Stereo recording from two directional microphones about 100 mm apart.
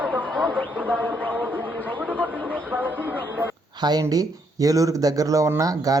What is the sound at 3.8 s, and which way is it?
Speech, 40° right (ahead or behind).